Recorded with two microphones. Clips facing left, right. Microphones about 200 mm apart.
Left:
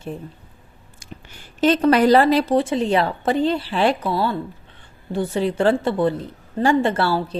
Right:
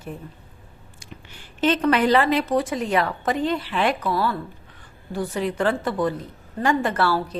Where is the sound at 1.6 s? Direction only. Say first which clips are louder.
Left 4 dB; 40° left (ahead or behind).